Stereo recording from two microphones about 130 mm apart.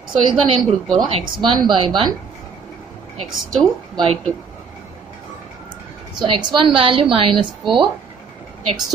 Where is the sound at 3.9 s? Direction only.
45° right (ahead or behind).